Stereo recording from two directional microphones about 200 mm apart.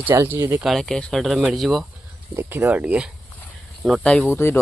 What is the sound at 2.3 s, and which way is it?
Speech, 10° right (ahead or behind).